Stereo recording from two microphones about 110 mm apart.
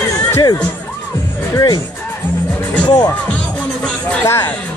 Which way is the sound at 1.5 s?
35° left (ahead or behind).